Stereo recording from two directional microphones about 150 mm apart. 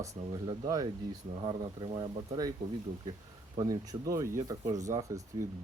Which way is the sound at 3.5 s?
25° right (ahead or behind).